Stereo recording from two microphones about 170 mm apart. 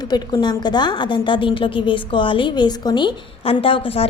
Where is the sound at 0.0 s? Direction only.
25° left (ahead or behind).